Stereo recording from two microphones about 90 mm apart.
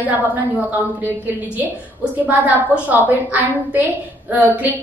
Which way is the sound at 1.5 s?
20° right (ahead or behind).